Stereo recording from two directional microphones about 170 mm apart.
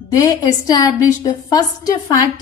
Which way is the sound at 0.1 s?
20° left (ahead or behind).